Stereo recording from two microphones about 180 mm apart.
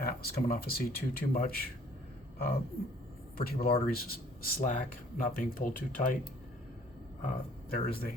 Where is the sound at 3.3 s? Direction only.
55° left (ahead or behind).